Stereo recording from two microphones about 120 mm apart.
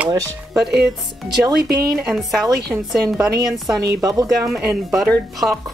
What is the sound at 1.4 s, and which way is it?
Speech, 30° right (ahead or behind).